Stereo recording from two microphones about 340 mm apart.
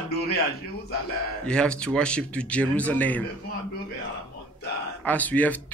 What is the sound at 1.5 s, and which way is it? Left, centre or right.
A man's voice, centre.